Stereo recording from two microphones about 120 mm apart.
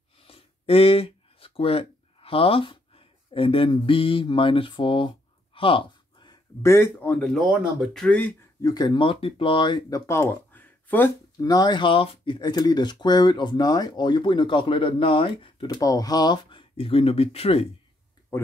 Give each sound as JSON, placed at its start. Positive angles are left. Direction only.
{"t": 0.2, "sound": "a sound", "side_deg": 50}
{"t": 6.6, "sound": "speech", "side_deg": 20}
{"t": 7.4, "sound": "speech", "side_deg": -10}
{"t": 7.9, "sound": "speech", "side_deg": 5}
{"t": 8.6, "sound": "speech", "side_deg": 35}
{"t": 11.4, "sound": "speech", "side_deg": 35}
{"t": 12.4, "sound": "speech", "side_deg": 35}
{"t": 15.6, "sound": "speech", "side_deg": 30}
{"t": 18.3, "sound": "speech", "side_deg": 20}